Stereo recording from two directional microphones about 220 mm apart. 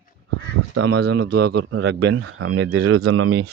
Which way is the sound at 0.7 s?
50° right (ahead or behind).